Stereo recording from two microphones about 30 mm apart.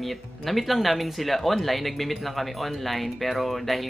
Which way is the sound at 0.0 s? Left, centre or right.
Centre.